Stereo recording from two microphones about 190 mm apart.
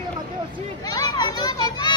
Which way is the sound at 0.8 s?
20° left (ahead or behind).